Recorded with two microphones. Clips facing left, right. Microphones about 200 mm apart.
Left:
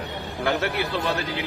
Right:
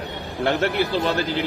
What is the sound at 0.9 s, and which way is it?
Speech, 35° right (ahead or behind).